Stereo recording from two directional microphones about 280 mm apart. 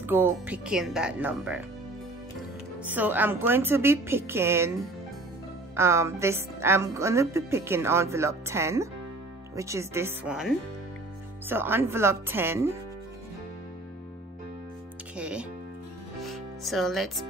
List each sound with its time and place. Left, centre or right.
0.0 s speech: centre
2.8 s a woman's voice: centre
5.8 s a woman's voice: centre
15.1 s speech: centre
16.3 s music: centre